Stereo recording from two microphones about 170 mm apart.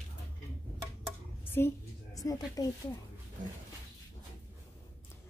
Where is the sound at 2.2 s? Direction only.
20° left (ahead or behind).